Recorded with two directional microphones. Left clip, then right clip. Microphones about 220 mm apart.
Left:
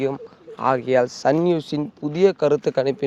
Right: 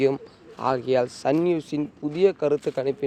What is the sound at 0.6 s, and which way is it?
Speech, 20° left (ahead or behind).